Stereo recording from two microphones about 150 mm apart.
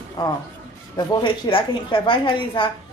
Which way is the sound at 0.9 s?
30° left (ahead or behind).